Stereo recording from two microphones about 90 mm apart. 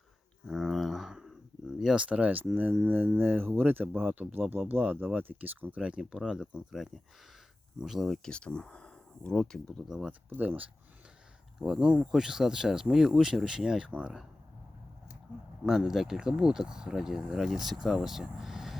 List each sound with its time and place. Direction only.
0.4 s a sound: 5° right (ahead or behind)
1.8 s speech: 5° right (ahead or behind); by 9.6 s 10° left (ahead or behind)
10.1 s speech: 20° right (ahead or behind)
11.6 s speech: 5° right (ahead or behind)
15.6 s speech: 5° right (ahead or behind)